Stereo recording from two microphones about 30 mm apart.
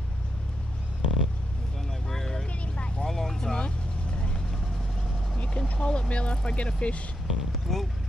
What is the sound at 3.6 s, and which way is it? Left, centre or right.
Vehicle, left.